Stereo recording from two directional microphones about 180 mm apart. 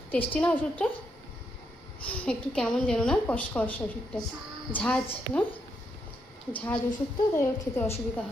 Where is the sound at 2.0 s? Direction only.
10° left (ahead or behind).